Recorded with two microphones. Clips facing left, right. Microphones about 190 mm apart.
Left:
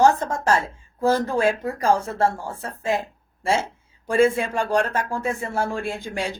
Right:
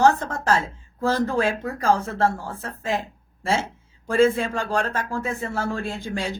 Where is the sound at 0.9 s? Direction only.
15° left (ahead or behind).